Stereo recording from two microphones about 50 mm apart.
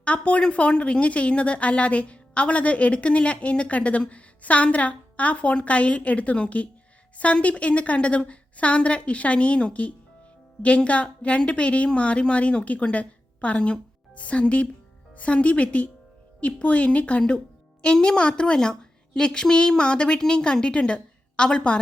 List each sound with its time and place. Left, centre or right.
0.0 s a woman's voice: left